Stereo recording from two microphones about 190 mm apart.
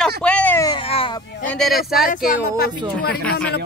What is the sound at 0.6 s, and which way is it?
Speech, 25° left (ahead or behind).